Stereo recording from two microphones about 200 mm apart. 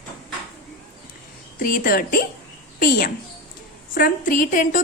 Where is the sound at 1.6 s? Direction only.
45° left (ahead or behind).